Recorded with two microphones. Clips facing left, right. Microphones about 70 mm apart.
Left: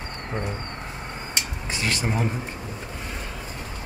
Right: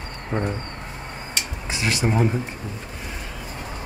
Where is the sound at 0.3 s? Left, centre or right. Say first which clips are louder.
Right 5 dB; right.